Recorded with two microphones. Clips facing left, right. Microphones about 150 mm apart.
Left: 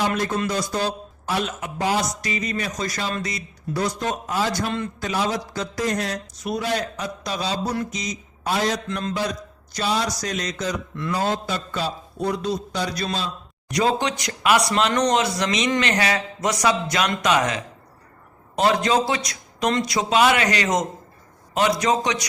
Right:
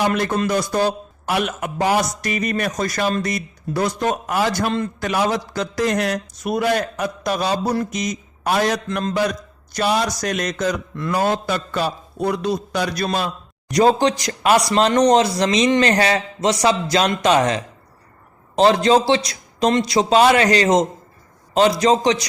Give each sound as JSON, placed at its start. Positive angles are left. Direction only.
{"t": 0.1, "sound": "a man's voice", "side_deg": -60}
{"t": 11.1, "sound": "a man's voice", "side_deg": -75}
{"t": 13.7, "sound": "a man's voice", "side_deg": -40}